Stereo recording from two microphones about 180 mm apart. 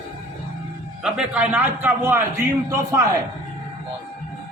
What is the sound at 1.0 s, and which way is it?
A man's voice, 5° right (ahead or behind).